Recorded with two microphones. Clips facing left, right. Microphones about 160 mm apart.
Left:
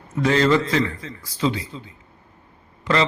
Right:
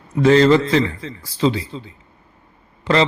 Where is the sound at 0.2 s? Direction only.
30° right (ahead or behind).